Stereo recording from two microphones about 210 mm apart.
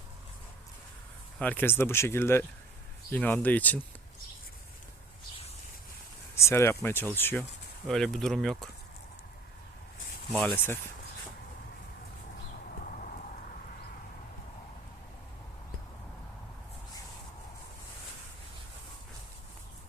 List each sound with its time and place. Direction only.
1.4 s speech: 10° left (ahead or behind)
6.3 s speech: 15° left (ahead or behind)
10.3 s speech: 10° left (ahead or behind)
12.8 s a sound: 40° left (ahead or behind)